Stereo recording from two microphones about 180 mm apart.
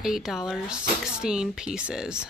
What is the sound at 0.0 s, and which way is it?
Speech, centre (ahead or behind).